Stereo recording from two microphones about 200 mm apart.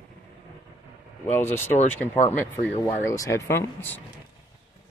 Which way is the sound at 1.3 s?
10° left (ahead or behind).